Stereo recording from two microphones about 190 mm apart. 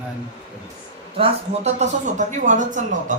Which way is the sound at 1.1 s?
35° right (ahead or behind).